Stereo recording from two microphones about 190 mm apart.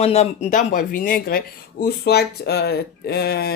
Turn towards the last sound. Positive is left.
turn(degrees=55)  # may be behind; listen again after turning